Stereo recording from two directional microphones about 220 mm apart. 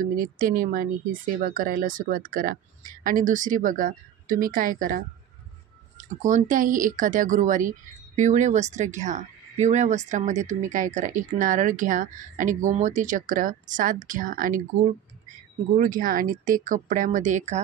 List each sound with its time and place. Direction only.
0.0 s speech: 40° right (ahead or behind)
15.8 s speech: 40° right (ahead or behind)